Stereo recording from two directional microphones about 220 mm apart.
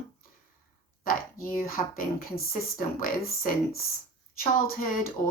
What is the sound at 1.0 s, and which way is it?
A woman's voice, 40° left (ahead or behind).